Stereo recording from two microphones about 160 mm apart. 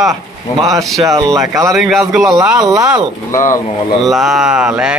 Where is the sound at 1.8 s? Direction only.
Centre (ahead or behind).